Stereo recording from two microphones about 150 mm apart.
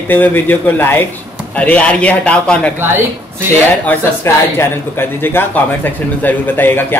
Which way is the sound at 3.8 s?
15° left (ahead or behind).